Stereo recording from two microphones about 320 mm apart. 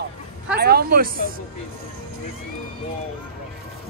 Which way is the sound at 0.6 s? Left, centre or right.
Right.